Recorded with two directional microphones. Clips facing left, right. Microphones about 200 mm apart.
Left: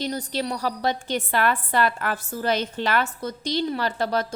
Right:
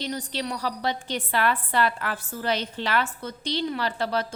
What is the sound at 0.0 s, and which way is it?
A woman's voice, 40° left (ahead or behind).